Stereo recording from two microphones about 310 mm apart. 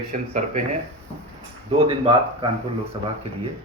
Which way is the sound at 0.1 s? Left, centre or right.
Right.